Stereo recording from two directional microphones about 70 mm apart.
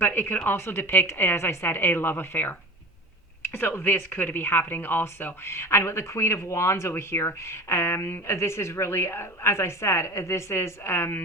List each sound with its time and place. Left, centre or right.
0.0 s speech: left